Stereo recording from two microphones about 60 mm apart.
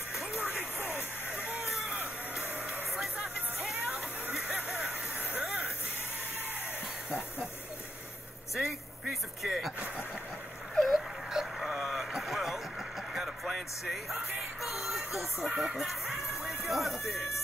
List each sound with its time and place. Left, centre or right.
0.6 s vehicle: left
4.7 s a sound: right
9.1 s music: centre
10.7 s a sound: centre
11.3 s vehicle: centre
13.1 s speech: centre
14.6 s music: centre